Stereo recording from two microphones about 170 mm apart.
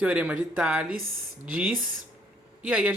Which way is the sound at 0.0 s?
10° right (ahead or behind).